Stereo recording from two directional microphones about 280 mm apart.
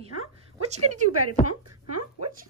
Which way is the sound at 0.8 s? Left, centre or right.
Right.